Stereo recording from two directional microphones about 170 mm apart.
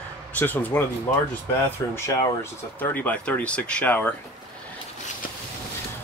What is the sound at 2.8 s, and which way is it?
Speech, 10° left (ahead or behind).